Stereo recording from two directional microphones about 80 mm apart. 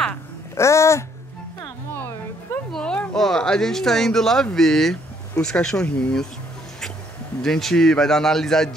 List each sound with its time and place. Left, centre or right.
0.6 s music: left
2.7 s a man's voice: centre
7.4 s a man's voice: centre